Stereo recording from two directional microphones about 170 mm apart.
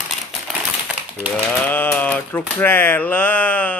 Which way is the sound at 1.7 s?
10° left (ahead or behind).